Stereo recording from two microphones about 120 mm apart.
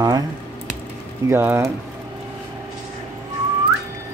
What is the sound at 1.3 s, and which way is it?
Speech, 20° right (ahead or behind).